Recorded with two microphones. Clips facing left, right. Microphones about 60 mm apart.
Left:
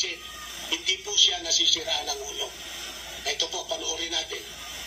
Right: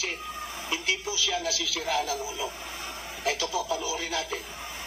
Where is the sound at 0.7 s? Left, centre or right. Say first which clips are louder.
Even; right.